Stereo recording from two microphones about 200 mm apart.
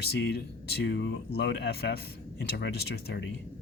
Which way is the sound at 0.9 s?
70° left (ahead or behind).